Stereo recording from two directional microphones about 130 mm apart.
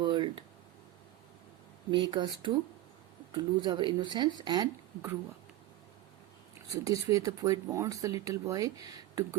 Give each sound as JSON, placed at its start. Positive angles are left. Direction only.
{"t": 0.0, "sound": "a sound", "side_deg": -35}
{"t": 1.9, "sound": "speech", "side_deg": -40}
{"t": 6.8, "sound": "speech", "side_deg": -25}